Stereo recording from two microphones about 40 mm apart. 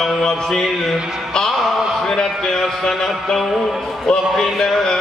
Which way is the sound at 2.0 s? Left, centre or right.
Centre.